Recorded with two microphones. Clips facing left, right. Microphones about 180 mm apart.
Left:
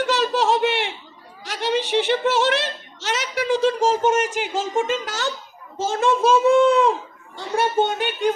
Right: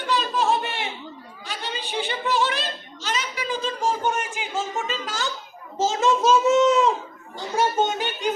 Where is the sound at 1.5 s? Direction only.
80° left.